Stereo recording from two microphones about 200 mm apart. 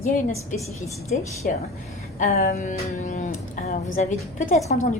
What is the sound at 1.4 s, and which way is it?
Speech, 45° left (ahead or behind).